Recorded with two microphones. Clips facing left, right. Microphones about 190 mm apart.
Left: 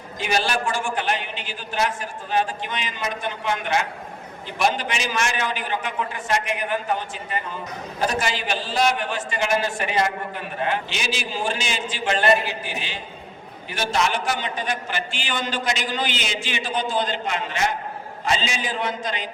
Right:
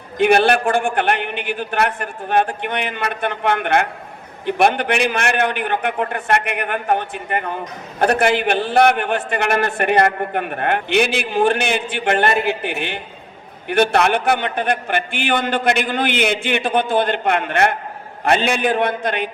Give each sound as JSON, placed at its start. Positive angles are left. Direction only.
{"t": 0.2, "sound": "a man's voice", "side_deg": -60}